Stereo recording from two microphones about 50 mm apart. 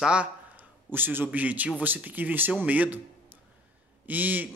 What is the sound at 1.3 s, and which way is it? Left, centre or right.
Speech, right.